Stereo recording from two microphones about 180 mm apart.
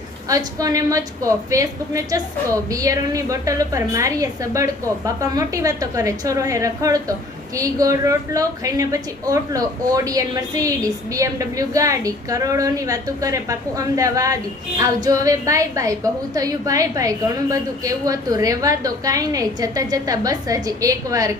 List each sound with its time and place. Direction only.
0.3 s a woman's voice: 20° right (ahead or behind)